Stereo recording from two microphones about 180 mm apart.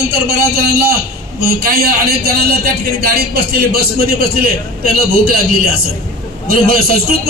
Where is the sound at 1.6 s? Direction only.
55° right (ahead or behind).